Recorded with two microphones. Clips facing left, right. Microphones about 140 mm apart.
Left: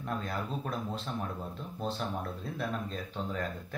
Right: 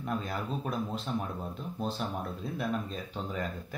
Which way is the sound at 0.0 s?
5° right (ahead or behind).